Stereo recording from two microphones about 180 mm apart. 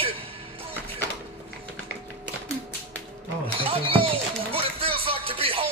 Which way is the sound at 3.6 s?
30° right (ahead or behind).